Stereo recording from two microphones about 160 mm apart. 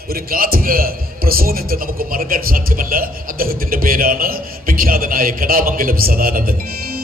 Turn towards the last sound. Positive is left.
turn(degrees=-65)  # may be behind; listen again after turning